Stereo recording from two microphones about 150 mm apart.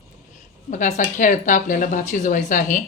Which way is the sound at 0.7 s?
55° left (ahead or behind).